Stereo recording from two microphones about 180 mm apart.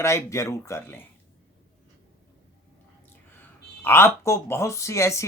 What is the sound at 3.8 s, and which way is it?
Speech, 15° left (ahead or behind).